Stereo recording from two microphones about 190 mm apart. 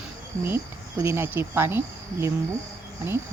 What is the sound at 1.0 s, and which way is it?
Speech, 10° right (ahead or behind).